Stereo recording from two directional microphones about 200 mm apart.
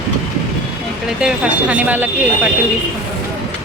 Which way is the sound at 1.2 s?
5° right (ahead or behind).